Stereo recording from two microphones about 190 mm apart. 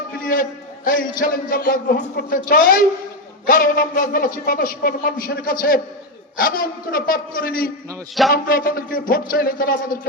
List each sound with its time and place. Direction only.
0.2 s a man's voice: 45° left (ahead or behind)